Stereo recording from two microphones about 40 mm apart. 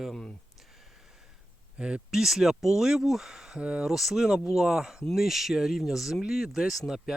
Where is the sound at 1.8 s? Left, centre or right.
Right.